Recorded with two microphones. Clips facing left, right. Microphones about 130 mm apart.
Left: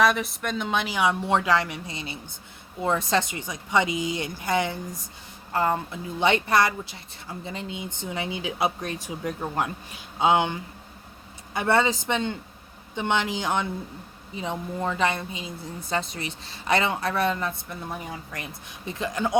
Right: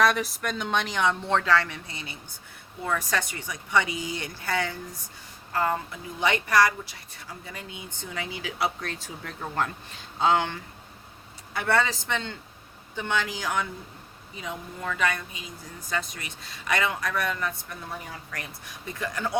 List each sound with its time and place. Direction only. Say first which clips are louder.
0.0 s speech: left 1 dB; centre (ahead or behind); by 19.4 s 20° left (ahead or behind)